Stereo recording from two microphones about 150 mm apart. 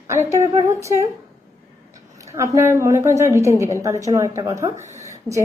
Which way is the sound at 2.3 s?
20° right (ahead or behind).